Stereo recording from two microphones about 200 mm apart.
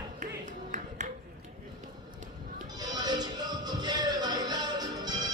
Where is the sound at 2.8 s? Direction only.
20° right (ahead or behind).